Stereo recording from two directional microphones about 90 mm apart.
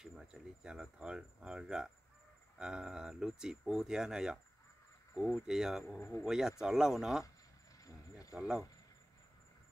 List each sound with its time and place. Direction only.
0.0 s speech: 5° right (ahead or behind)
5.9 s speech: 25° left (ahead or behind)
6.2 s speech: 5° right (ahead or behind)
7.8 s a sound: 40° left (ahead or behind)
8.4 s speech: 5° right (ahead or behind)